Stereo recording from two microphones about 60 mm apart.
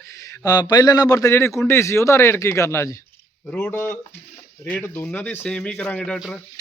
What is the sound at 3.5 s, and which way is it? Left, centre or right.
Speech, left.